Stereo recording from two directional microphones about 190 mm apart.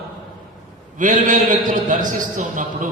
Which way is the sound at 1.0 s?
45° right (ahead or behind).